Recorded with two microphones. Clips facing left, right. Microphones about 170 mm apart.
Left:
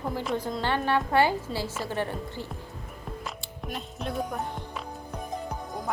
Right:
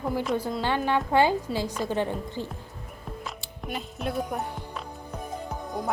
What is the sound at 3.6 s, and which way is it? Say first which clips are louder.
Music: right 3 dB; 5° right (ahead or behind).